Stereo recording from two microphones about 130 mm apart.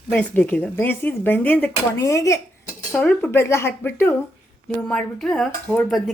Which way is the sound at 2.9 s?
10° left (ahead or behind).